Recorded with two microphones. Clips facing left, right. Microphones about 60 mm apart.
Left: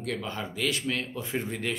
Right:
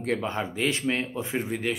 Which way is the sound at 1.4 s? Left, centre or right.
Centre.